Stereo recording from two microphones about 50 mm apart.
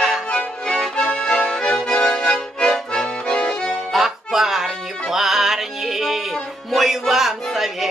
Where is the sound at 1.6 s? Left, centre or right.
Left.